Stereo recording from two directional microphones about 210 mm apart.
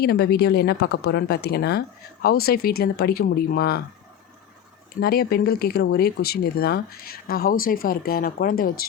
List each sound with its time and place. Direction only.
0.0 s speech: 50° left (ahead or behind)
4.9 s speech: 45° left (ahead or behind)